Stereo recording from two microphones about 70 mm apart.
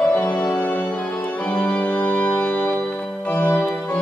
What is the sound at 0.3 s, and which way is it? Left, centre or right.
Organ, centre.